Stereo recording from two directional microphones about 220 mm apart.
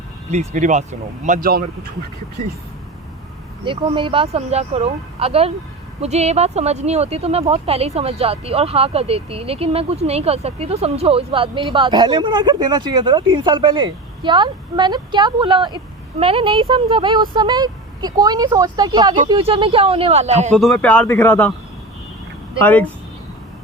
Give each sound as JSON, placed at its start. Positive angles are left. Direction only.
{"t": 0.3, "sound": "speech", "side_deg": -35}
{"t": 3.6, "sound": "speech", "side_deg": -25}
{"t": 20.6, "sound": "speech", "side_deg": 5}
{"t": 22.6, "sound": "speech", "side_deg": 5}